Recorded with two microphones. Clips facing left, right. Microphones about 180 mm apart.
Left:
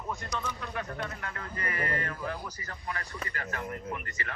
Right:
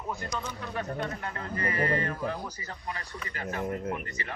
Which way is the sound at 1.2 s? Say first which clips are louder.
Right 4 dB; 25° right (ahead or behind).